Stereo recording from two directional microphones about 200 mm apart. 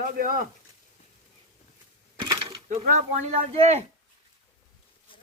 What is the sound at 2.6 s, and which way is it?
Speech, 35° right (ahead or behind).